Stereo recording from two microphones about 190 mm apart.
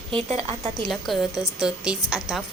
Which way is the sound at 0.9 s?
Centre (ahead or behind).